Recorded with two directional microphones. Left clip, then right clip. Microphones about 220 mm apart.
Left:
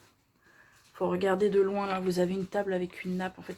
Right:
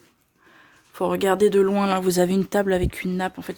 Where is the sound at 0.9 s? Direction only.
55° right (ahead or behind).